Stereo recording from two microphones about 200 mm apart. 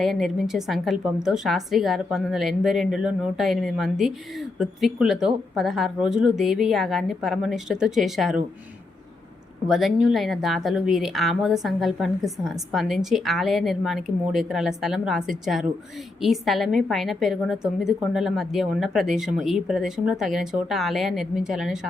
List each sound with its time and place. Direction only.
0.0 s a woman's voice: centre (ahead or behind)
9.6 s a woman's voice: centre (ahead or behind)